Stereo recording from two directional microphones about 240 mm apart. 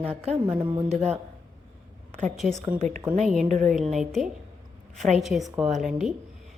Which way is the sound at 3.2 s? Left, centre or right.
Centre.